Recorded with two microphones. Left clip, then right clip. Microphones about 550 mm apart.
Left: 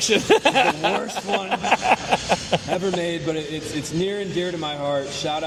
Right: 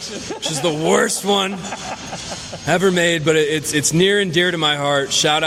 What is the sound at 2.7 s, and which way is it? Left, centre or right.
Speech, right.